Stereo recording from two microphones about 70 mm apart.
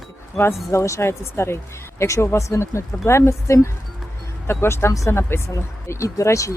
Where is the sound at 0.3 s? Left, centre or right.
Left.